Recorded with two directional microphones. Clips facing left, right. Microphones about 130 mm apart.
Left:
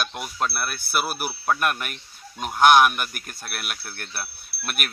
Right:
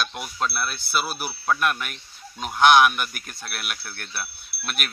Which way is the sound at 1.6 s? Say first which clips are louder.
Even; 50° left (ahead or behind).